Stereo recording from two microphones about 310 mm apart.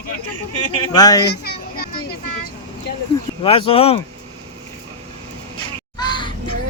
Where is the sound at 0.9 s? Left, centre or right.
Centre.